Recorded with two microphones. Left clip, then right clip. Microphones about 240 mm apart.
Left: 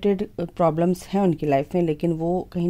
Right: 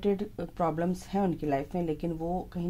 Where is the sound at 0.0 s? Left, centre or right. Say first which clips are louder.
Left 7 dB; left.